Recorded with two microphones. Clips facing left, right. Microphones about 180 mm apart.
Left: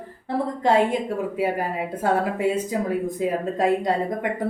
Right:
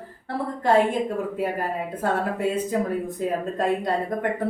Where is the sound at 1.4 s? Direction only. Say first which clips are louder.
Left 2 dB; 10° left (ahead or behind).